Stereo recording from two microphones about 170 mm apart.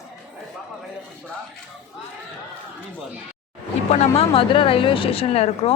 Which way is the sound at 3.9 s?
40° left (ahead or behind).